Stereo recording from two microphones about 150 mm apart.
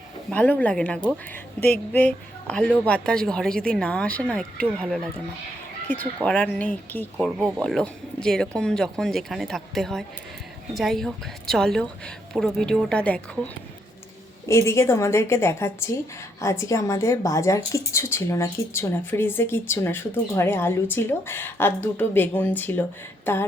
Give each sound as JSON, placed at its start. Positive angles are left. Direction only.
{"t": 0.3, "sound": "speech", "side_deg": 10}
{"t": 6.1, "sound": "speech", "side_deg": 5}
{"t": 14.4, "sound": "a woman's voice", "side_deg": 20}